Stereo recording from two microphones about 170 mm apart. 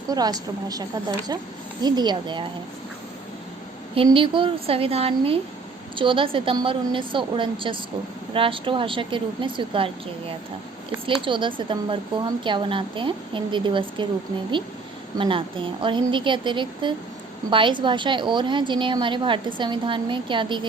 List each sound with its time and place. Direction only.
0.1 s a woman's voice: 20° right (ahead or behind)
3.9 s a woman's voice: 30° right (ahead or behind)
15.2 s a woman's voice: 30° right (ahead or behind)